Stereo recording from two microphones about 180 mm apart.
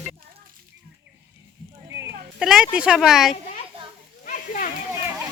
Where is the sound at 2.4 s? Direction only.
5° right (ahead or behind).